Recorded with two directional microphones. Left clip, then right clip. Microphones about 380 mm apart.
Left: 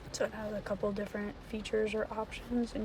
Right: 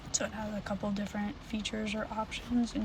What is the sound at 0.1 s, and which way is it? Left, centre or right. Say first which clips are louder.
Speech: left 1 dB; centre.